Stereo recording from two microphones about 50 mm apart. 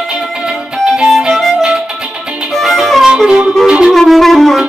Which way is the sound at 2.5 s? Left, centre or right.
Centre.